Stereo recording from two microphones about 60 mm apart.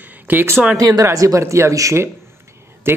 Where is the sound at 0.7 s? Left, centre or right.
Right.